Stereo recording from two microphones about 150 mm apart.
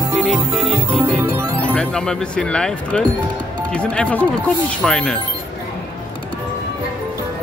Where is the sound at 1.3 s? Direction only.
20° right (ahead or behind).